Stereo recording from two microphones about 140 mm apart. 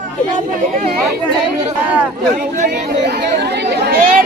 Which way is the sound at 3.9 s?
85° right.